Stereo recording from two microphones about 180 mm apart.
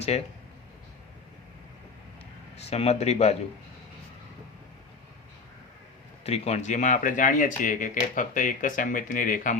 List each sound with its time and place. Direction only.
0.1 s speech: 35° left (ahead or behind)
2.6 s speech: 35° left (ahead or behind)
6.2 s speech: 35° left (ahead or behind)